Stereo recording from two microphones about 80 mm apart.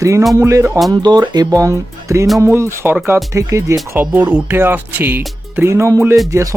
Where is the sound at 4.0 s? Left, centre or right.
Centre.